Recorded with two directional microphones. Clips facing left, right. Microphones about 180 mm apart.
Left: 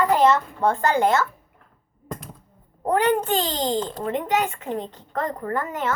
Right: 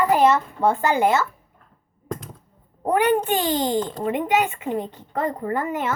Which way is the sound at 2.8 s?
15° right (ahead or behind).